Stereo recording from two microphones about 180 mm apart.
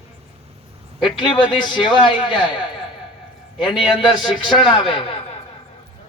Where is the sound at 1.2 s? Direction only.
25° left (ahead or behind).